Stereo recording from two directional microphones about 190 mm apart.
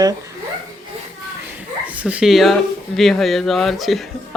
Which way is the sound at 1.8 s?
5° right (ahead or behind).